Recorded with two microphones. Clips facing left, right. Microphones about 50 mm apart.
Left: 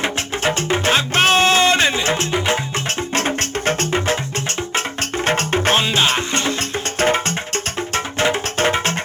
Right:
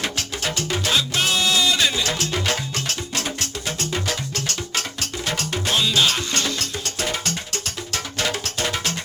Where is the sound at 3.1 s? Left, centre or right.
Left.